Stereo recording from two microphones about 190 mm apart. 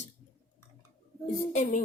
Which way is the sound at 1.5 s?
40° left (ahead or behind).